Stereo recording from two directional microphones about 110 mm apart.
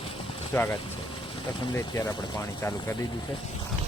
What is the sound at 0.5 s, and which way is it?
Speech, 25° left (ahead or behind).